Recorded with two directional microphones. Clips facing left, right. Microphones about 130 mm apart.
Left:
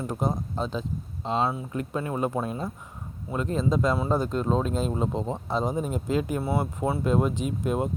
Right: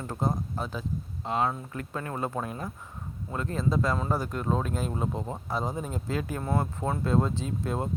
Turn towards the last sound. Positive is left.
turn(degrees=20)  # may be behind; listen again after turning